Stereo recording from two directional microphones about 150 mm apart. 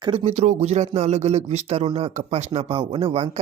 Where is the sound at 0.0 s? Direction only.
30° right (ahead or behind).